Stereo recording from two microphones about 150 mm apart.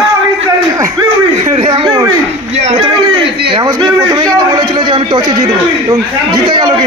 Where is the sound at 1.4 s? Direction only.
40° right (ahead or behind).